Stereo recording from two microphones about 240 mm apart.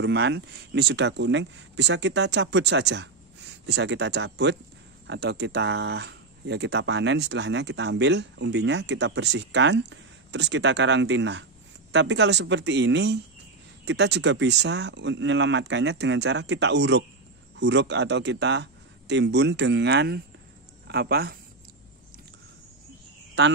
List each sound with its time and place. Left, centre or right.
0.0 s speech: right